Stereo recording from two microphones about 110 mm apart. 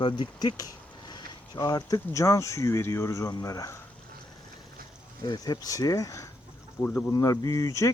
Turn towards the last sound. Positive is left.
turn(degrees=30)  # may be behind; listen again after turning